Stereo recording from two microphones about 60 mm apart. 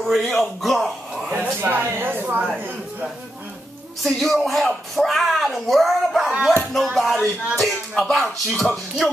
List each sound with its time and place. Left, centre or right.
0.2 s speech: centre
1.3 s speech: right
4.0 s speech: centre